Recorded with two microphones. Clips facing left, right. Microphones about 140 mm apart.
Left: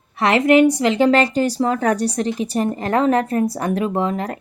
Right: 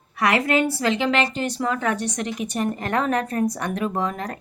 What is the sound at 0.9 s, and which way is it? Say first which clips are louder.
A woman's voice: left 7 dB; 40° left (ahead or behind).